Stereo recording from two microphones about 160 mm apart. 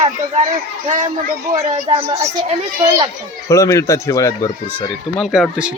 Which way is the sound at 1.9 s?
40° right (ahead or behind).